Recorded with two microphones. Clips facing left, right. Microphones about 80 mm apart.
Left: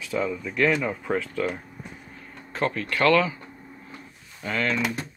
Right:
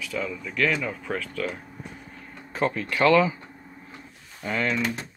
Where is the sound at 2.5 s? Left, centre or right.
Centre.